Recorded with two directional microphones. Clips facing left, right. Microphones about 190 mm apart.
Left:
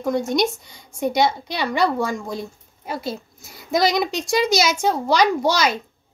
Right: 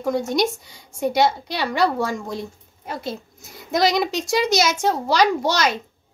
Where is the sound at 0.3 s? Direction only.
5° right (ahead or behind).